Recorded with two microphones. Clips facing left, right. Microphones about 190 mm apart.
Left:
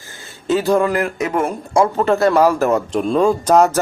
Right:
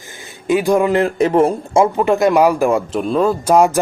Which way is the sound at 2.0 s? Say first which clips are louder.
Left 1 dB; 15° right (ahead or behind).